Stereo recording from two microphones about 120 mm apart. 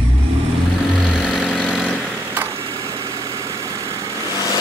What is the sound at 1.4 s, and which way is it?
Vehicle, 5° left (ahead or behind).